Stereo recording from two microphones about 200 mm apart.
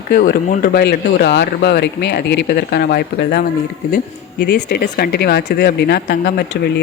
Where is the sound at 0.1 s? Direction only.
45° left (ahead or behind).